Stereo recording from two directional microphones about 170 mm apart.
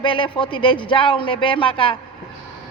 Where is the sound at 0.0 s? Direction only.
30° left (ahead or behind).